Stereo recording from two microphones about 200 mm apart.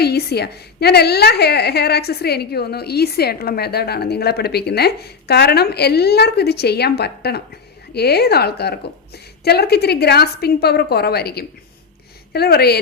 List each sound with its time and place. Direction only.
0.0 s a woman's voice: 55° left (ahead or behind)